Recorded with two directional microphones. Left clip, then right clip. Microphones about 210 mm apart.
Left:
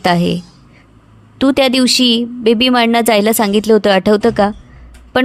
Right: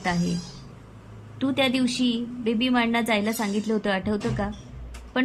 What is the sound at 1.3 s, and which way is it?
A woman's voice, 45° left (ahead or behind).